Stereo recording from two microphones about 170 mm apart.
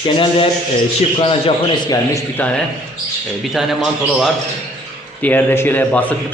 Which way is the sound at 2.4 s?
10° left (ahead or behind).